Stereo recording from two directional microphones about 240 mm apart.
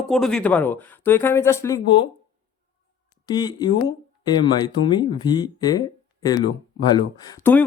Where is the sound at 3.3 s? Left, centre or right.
Centre.